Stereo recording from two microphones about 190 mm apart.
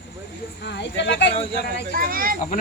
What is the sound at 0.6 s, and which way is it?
Speech, 65° left (ahead or behind).